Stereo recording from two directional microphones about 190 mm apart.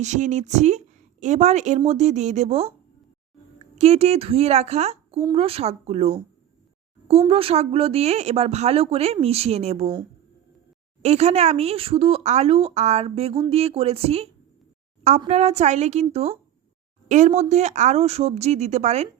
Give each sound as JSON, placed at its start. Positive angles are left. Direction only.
{"t": 0.0, "sound": "a woman's voice", "side_deg": -40}
{"t": 11.0, "sound": "speech", "side_deg": -35}
{"t": 15.3, "sound": "speech", "side_deg": -35}